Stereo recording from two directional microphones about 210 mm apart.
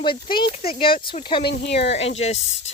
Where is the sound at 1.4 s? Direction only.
50° left (ahead or behind).